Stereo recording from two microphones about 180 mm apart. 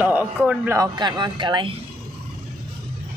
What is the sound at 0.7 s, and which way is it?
Speech, 20° right (ahead or behind).